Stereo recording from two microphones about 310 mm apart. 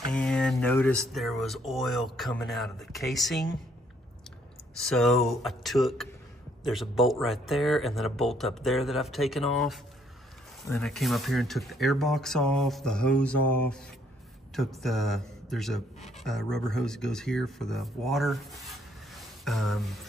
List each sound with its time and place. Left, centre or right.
0.1 s speech: centre
4.7 s speech: centre
19.1 s a sound: centre